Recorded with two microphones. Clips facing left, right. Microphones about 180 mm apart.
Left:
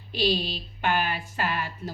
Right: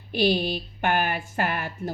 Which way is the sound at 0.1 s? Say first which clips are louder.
Right 4 dB; 55° right (ahead or behind).